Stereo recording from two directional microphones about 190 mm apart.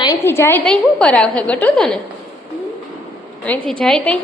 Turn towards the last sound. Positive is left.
turn(degrees=5)  # may be behind; listen again after turning